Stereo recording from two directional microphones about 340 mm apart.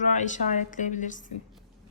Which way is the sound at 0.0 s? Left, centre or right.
Left.